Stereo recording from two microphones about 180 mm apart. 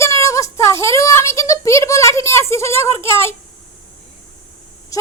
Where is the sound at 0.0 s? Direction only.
15° left (ahead or behind).